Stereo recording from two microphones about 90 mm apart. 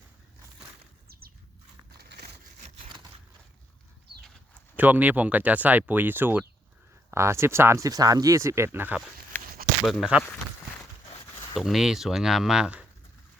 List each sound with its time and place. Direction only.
4.8 s speech: 20° right (ahead or behind)
7.9 s speech: 45° right (ahead or behind); by 9.0 s 25° right (ahead or behind)
9.3 s a sound: 20° left (ahead or behind)
9.8 s speech: centre (ahead or behind)
11.5 s speech: 5° right (ahead or behind)